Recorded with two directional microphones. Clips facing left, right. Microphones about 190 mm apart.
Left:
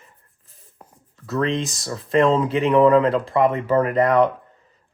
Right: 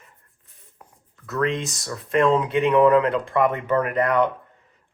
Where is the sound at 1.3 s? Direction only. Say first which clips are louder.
Left 1 dB; 35° left (ahead or behind).